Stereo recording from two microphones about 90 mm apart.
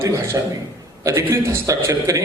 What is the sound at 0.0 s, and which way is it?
A man's voice, 30° right (ahead or behind).